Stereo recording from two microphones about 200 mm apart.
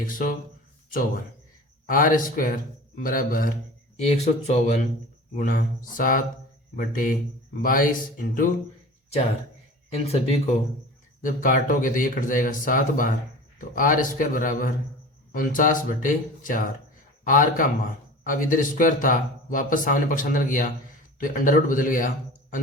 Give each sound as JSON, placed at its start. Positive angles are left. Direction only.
{"t": 0.1, "sound": "a man's voice", "side_deg": 45}
{"t": 9.9, "sound": "a man's voice", "side_deg": 30}
{"t": 11.2, "sound": "a man's voice", "side_deg": 45}